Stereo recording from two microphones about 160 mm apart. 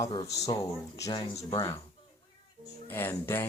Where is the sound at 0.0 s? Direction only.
30° left (ahead or behind).